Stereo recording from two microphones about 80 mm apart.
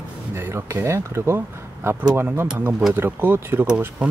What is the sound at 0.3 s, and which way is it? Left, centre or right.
Speech, right.